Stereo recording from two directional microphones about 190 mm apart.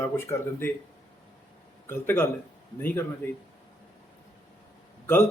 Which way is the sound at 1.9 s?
10° left (ahead or behind).